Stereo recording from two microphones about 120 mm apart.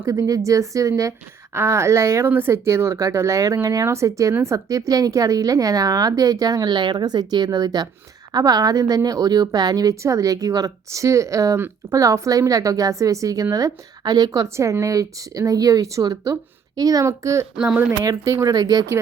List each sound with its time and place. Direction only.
0.0 s a woman's voice: 30° right (ahead or behind)
17.6 s speech: 10° right (ahead or behind)
18.0 s speech: 30° right (ahead or behind)